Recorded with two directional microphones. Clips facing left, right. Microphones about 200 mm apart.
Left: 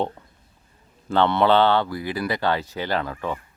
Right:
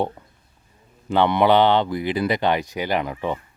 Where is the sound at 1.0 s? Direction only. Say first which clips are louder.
Right 1 dB; 15° right (ahead or behind).